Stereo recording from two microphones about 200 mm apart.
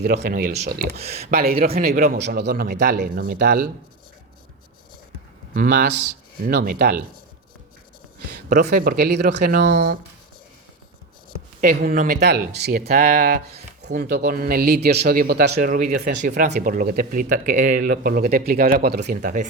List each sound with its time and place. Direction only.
0.0 s speech: 50° right (ahead or behind)
6.6 s speech: 50° right (ahead or behind)
8.4 s speech: 45° right (ahead or behind)
11.6 s speech: 45° right (ahead or behind)